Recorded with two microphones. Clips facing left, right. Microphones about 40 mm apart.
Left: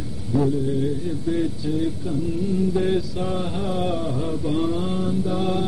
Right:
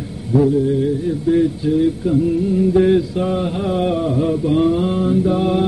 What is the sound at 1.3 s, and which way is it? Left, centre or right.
Mantra, right.